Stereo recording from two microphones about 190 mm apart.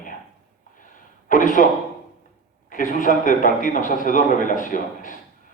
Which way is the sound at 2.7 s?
45° left (ahead or behind).